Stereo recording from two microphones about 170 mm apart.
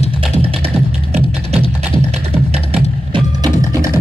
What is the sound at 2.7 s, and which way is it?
Music, 30° right (ahead or behind).